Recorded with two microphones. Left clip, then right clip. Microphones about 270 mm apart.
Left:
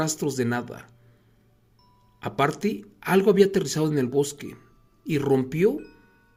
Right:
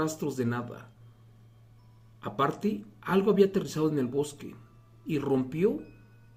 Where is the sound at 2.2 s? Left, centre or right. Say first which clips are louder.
Left 5 dB; left.